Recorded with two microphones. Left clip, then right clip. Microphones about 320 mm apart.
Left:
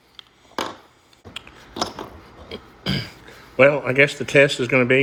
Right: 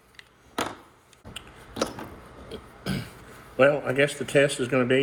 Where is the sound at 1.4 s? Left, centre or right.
Left.